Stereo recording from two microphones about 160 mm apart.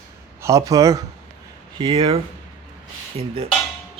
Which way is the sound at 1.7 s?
35° right (ahead or behind).